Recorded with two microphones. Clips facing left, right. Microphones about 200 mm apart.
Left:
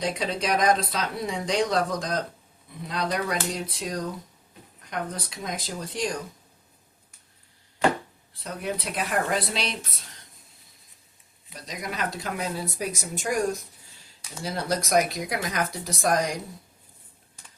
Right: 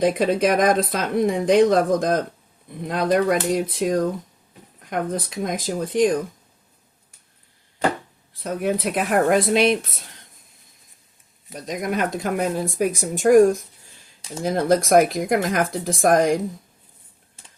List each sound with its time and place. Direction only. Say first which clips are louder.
0.0 s speech: right 10 dB; 50° right (ahead or behind)
8.4 s speech: right 8 dB; 55° right (ahead or behind)
11.4 s speech: right 9 dB; 50° right (ahead or behind)